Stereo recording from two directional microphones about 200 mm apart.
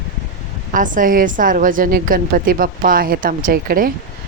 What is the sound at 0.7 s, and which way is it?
A woman's voice, 40° right (ahead or behind).